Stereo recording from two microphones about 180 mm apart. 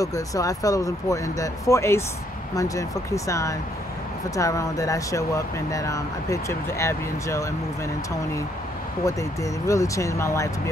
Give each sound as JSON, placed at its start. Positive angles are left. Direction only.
{"t": 0.0, "sound": "speech", "side_deg": 20}
{"t": 9.0, "sound": "speech", "side_deg": 15}